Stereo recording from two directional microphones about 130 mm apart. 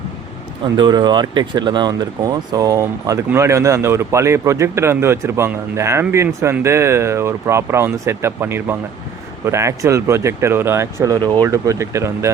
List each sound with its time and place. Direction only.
0.6 s a man's voice: 35° right (ahead or behind)